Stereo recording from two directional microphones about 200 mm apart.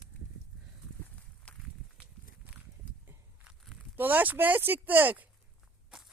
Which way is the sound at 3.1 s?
5° right (ahead or behind).